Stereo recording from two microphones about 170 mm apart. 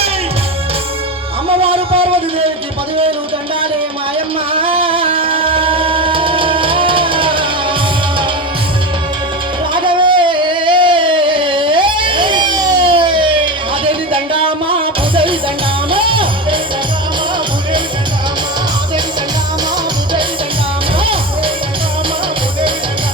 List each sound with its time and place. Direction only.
1.6 s a sound: 35° right (ahead or behind)
4.6 s music: 35° right (ahead or behind)
9.7 s singing: 30° right (ahead or behind)
15.9 s music: 30° right (ahead or behind)
21.0 s music: 30° right (ahead or behind)